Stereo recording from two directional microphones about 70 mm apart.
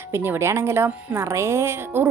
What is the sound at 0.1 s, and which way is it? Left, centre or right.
A woman's voice, right.